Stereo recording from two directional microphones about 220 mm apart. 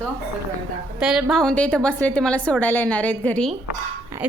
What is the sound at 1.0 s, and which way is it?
A woman's voice, 5° right (ahead or behind).